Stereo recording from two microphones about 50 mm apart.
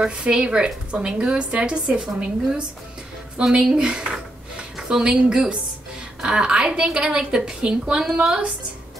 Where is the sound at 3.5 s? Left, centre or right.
Centre.